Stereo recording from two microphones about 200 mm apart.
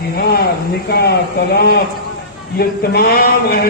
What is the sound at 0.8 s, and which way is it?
Speech, 55° left (ahead or behind).